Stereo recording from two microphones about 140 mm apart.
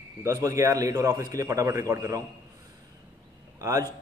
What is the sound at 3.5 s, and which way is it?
Speech, 25° right (ahead or behind).